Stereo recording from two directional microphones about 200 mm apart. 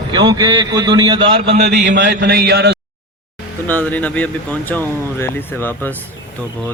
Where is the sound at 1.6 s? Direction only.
60° right (ahead or behind).